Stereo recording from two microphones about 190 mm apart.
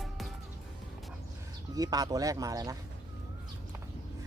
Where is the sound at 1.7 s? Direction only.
20° right (ahead or behind).